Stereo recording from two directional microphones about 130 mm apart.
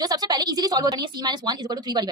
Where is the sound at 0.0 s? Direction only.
30° right (ahead or behind).